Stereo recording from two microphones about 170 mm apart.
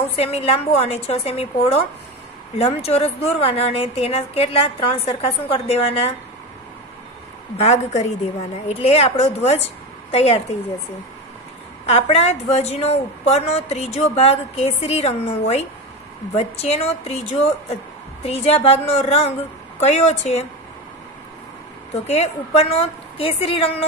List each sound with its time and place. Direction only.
0.2 s a woman's voice: 35° left (ahead or behind)
7.5 s a woman's voice: 40° left (ahead or behind)
11.8 s a woman's voice: 40° left (ahead or behind)
18.2 s a woman's voice: 35° left (ahead or behind)
21.9 s a woman's voice: 40° left (ahead or behind)